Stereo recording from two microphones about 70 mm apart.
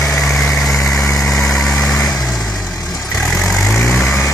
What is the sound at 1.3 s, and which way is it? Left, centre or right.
Vehicle, centre.